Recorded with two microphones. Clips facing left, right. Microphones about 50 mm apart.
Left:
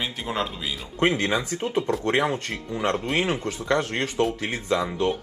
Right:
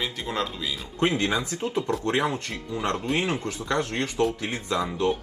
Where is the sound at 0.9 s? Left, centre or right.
Left.